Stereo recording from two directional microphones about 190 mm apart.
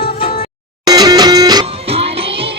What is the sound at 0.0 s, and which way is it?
Music, 50° left (ahead or behind).